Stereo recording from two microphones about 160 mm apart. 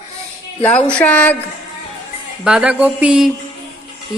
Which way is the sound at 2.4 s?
5° right (ahead or behind).